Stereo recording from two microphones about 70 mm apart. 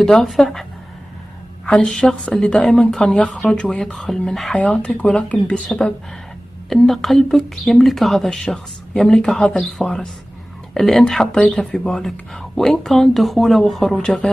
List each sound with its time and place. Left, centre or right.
0.0 s speech: centre
1.7 s speech: centre
4.6 s speech: centre
6.7 s speech: centre